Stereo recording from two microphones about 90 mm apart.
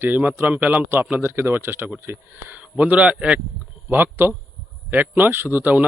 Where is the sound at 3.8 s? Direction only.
25° right (ahead or behind).